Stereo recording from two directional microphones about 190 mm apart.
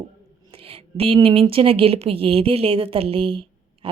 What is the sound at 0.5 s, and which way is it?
Speech, 30° right (ahead or behind).